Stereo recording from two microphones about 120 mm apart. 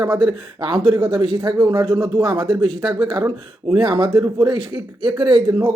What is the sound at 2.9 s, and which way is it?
Speech, 40° right (ahead or behind).